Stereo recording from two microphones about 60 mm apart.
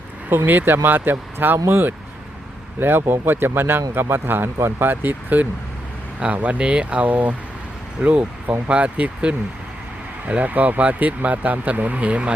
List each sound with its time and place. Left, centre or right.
0.3 s speech: right